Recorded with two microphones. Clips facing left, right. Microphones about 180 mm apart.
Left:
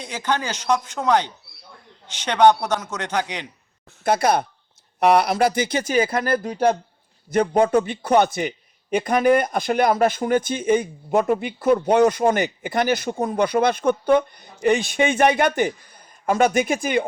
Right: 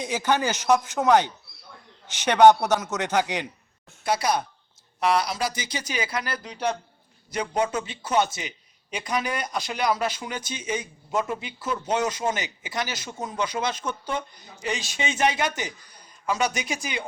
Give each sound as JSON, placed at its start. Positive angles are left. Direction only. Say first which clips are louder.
{"t": 0.0, "sound": "a man's voice", "louder": "right 1 dB", "side_deg": -10}
{"t": 4.0, "sound": "a man's voice", "louder": "left 5 dB", "side_deg": 55}